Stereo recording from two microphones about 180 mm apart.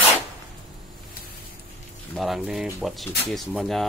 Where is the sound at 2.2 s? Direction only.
Centre (ahead or behind).